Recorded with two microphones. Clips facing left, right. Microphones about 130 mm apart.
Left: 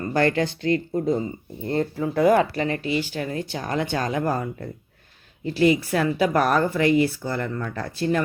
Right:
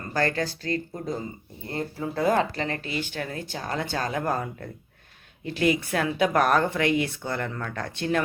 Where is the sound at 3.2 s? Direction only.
40° left (ahead or behind).